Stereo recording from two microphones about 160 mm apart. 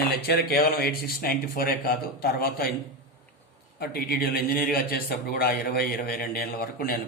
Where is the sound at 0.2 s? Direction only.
70° left (ahead or behind).